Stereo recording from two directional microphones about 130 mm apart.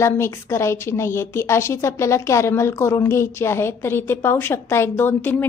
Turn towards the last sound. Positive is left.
turn(degrees=15)  # may be behind; listen again after turning